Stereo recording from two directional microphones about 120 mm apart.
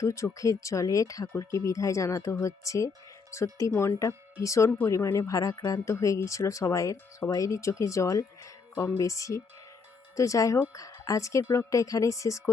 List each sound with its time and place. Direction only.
0.0 s speech: 25° left (ahead or behind)
9.0 s speech: 25° left (ahead or behind)